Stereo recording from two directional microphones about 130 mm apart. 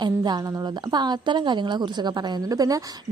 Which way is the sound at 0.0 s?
30° right (ahead or behind).